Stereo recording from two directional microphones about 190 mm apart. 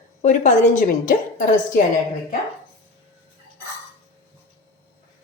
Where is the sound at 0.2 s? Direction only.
40° left (ahead or behind).